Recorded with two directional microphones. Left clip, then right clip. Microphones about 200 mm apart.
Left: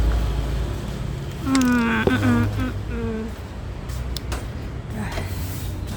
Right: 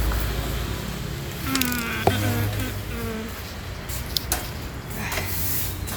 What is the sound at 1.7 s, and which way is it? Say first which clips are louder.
Insect: left 6 dB; 45° left (ahead or behind).